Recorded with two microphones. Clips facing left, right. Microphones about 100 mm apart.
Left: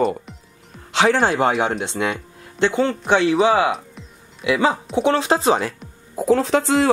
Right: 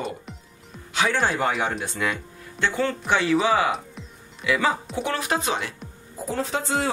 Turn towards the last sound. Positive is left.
turn(degrees=80)